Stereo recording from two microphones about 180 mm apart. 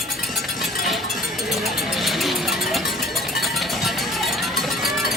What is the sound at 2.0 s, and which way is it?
Music, centre (ahead or behind).